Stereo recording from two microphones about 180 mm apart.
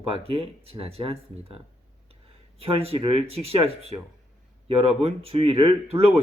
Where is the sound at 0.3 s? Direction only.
35° right (ahead or behind).